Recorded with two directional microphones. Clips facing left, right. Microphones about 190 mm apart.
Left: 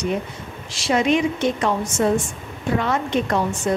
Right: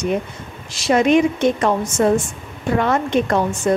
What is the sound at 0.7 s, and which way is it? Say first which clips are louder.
A woman's voice: right 4 dB; 50° right (ahead or behind).